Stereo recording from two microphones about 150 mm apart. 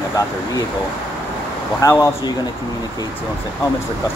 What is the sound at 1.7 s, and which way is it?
Speech, 20° left (ahead or behind).